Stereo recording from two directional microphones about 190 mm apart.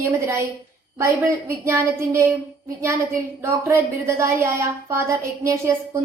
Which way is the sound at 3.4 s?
15° right (ahead or behind).